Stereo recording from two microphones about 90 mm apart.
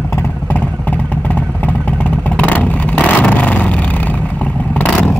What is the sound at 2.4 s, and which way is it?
Vehicle, 15° left (ahead or behind).